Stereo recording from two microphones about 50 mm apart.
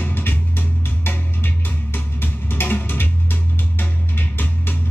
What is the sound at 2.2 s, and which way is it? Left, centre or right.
Music, left.